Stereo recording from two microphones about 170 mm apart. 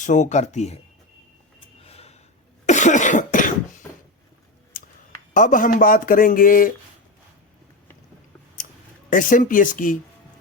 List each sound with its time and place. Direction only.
0.0 s speech: 45° left (ahead or behind)
1.6 s a sound: 35° left (ahead or behind)
2.6 s cough: 45° left (ahead or behind)
4.7 s a sound: 60° left (ahead or behind)
5.3 s speech: 50° left (ahead or behind)
9.0 s speech: 50° left (ahead or behind)